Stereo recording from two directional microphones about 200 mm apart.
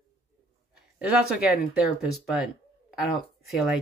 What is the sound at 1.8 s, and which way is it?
Speech, centre (ahead or behind).